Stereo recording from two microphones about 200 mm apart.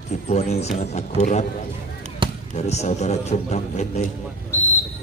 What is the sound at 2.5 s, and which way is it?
A man's voice, 35° left (ahead or behind).